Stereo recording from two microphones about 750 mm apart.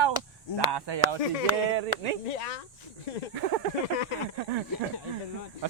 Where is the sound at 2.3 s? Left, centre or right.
Left.